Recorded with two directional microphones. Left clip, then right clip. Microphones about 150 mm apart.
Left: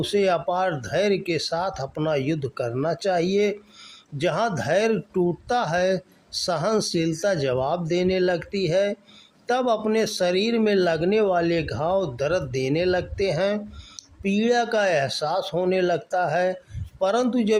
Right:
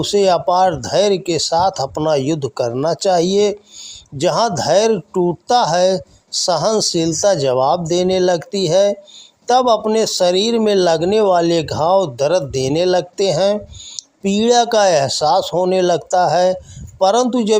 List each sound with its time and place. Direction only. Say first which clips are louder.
0.0 s speech: right 8 dB; 30° right (ahead or behind)